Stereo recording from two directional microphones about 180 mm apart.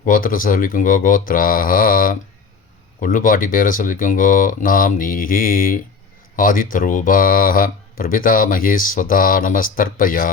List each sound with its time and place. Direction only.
0.0 s speech: 50° left (ahead or behind)